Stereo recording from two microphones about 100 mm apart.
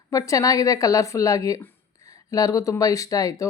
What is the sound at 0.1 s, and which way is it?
Speech, 35° left (ahead or behind).